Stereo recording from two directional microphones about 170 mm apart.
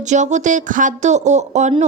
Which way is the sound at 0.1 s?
45° right (ahead or behind).